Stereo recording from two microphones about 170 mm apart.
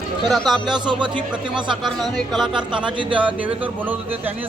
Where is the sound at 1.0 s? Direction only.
30° right (ahead or behind).